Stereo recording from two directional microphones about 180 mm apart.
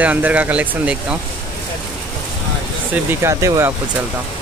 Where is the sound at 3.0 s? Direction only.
15° right (ahead or behind).